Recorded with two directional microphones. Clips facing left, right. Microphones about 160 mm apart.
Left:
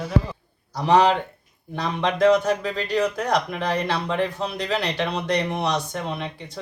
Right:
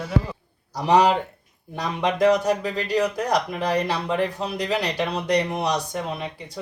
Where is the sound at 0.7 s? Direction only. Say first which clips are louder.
Even; 15° right (ahead or behind).